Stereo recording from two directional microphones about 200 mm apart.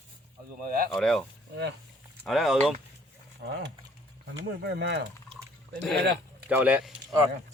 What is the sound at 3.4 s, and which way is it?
Speech, 55° right (ahead or behind).